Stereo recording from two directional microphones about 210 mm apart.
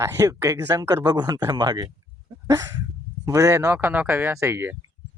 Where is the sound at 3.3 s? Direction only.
15° right (ahead or behind).